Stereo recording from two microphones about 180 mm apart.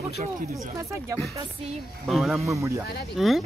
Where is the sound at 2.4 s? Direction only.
15° right (ahead or behind).